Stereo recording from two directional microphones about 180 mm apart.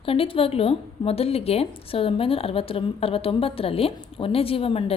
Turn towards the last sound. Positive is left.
turn(degrees=30)  # may be behind; listen again after turning